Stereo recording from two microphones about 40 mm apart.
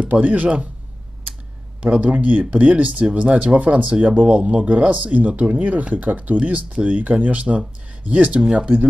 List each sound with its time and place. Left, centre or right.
0.1 s speech: right
1.8 s speech: right
8.4 s speech: right